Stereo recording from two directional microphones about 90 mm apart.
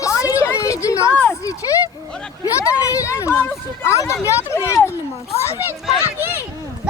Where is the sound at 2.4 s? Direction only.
40° left (ahead or behind).